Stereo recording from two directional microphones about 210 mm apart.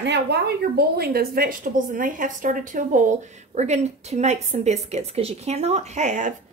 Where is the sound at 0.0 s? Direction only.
55° right (ahead or behind).